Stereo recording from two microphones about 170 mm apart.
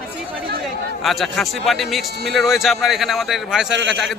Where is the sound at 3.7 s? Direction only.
90° right.